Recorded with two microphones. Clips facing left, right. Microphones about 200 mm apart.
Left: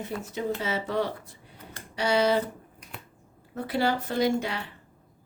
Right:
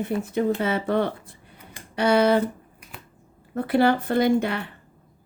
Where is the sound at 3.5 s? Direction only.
55° right (ahead or behind).